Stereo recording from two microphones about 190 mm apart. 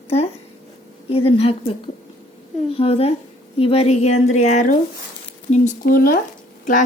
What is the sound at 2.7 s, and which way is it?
A woman's voice, 30° left (ahead or behind).